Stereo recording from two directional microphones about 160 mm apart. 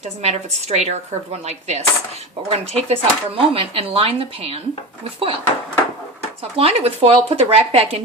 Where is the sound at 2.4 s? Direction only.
40° right (ahead or behind).